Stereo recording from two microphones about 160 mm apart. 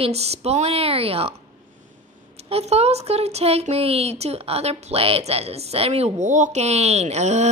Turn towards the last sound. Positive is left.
turn(degrees=-45)  # may be behind; listen again after turning